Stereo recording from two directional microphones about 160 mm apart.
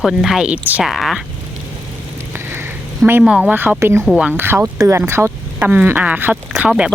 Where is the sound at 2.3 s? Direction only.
15° right (ahead or behind).